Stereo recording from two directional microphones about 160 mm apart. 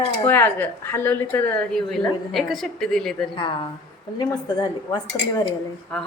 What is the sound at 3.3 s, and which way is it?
Speech, 30° left (ahead or behind).